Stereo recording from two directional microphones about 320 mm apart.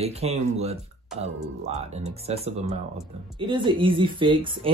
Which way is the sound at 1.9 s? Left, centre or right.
Right.